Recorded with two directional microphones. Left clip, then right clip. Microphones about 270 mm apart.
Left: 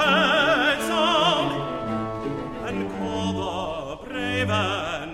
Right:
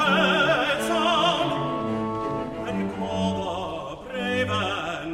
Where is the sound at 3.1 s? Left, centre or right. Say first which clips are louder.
Right 1 dB; left.